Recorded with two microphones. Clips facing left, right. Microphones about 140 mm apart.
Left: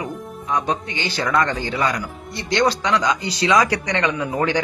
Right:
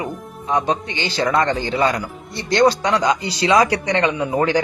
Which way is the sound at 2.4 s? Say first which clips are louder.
Right 4 dB; 35° right (ahead or behind).